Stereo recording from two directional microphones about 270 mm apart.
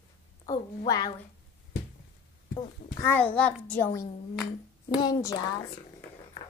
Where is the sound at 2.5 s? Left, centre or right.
Centre.